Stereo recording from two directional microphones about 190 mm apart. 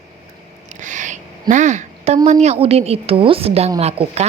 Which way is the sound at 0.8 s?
40° right (ahead or behind).